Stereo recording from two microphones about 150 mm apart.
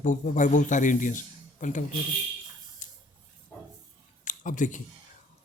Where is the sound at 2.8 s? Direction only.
55° left (ahead or behind).